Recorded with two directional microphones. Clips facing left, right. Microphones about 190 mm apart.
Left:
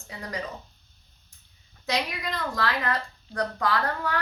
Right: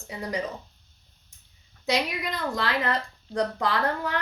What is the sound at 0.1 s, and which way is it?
Speech, 20° right (ahead or behind).